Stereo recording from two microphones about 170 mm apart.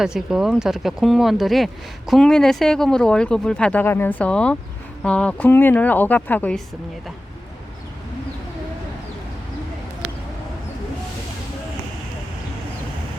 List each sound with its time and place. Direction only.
0.0 s a woman's voice: 5° right (ahead or behind)